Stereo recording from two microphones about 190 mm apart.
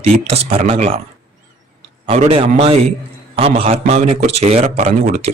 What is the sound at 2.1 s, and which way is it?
Speech, 35° right (ahead or behind).